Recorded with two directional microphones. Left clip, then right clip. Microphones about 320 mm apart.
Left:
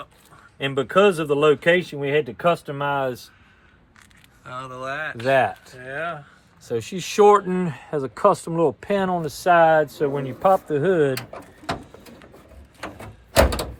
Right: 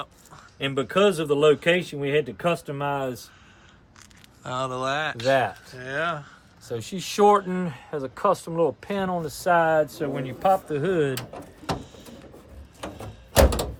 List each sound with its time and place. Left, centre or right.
0.6 s speech: centre
4.4 s speech: centre
5.2 s speech: left
5.6 s speech: centre
6.7 s speech: left